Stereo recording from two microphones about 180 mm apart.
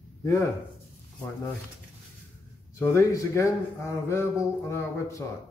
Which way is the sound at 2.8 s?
15° left (ahead or behind).